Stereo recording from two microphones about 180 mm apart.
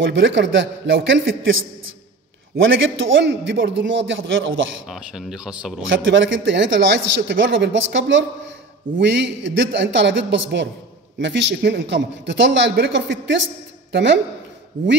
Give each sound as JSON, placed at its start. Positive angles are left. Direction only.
{"t": 0.0, "sound": "speech", "side_deg": -90}
{"t": 4.8, "sound": "speech", "side_deg": 0}
{"t": 5.9, "sound": "speech", "side_deg": -90}
{"t": 9.0, "sound": "a man's voice", "side_deg": -80}